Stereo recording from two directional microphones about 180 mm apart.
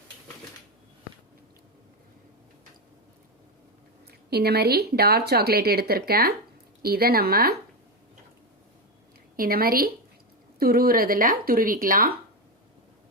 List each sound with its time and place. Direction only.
4.3 s speech: 60° right (ahead or behind)
9.3 s speech: 55° right (ahead or behind)